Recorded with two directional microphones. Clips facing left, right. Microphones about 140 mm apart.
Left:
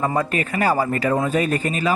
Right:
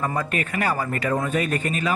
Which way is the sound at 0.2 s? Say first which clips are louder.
Left 4 dB; 35° left (ahead or behind).